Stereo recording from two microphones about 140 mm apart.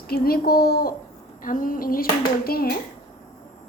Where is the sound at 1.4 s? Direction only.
75° left (ahead or behind); by 2.8 s 90° left.